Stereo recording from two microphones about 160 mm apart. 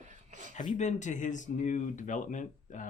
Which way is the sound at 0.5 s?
50° left (ahead or behind).